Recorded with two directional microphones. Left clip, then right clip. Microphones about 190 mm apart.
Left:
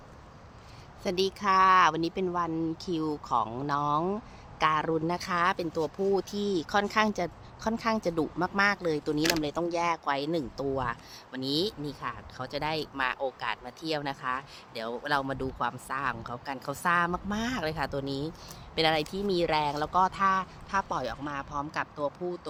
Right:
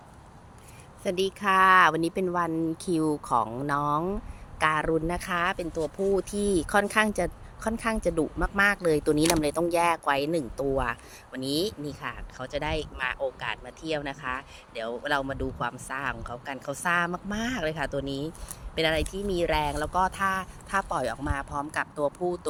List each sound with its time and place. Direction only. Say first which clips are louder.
1.0 s speech: right 1 dB; centre (ahead or behind)
6.5 s speech: right 3 dB; 15° right (ahead or behind)
20.7 s speech: right 5 dB; 15° right (ahead or behind)